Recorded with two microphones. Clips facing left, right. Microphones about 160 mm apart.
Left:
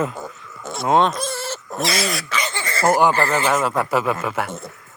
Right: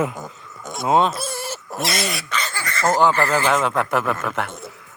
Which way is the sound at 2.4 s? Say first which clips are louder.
Left 2 dB; 20° left (ahead or behind).